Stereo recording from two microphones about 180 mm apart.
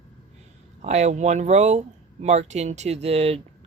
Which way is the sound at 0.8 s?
40° right (ahead or behind).